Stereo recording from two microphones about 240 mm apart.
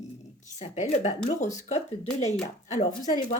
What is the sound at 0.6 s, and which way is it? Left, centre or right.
Speech, left.